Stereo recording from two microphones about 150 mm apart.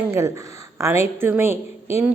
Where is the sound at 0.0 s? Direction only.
15° right (ahead or behind).